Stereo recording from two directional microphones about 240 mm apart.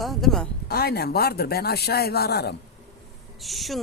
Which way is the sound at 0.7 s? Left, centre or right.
Left.